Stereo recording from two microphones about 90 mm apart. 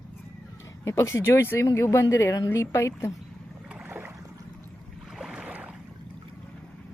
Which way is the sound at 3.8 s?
25° right (ahead or behind).